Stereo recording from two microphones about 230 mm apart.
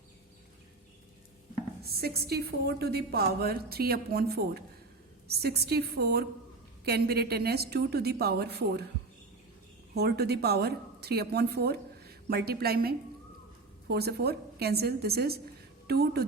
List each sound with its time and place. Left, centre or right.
1.8 s a woman's voice: right
9.9 s a woman's voice: right